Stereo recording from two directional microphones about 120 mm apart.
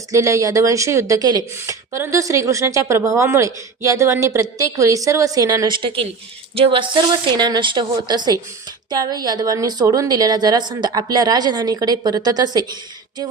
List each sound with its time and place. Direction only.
0.1 s a woman's voice: 25° right (ahead or behind)